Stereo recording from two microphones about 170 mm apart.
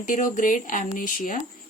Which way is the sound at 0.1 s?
50° left (ahead or behind).